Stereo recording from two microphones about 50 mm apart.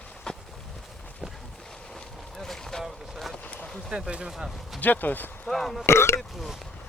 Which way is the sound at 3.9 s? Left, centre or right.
Centre.